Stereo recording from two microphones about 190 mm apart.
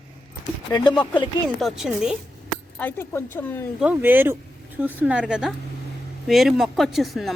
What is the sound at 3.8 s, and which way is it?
Speech, 10° right (ahead or behind).